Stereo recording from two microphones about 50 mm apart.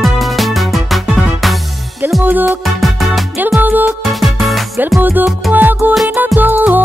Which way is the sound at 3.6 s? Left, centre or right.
Right.